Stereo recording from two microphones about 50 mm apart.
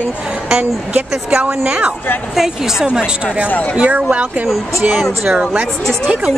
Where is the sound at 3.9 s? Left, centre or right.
Right.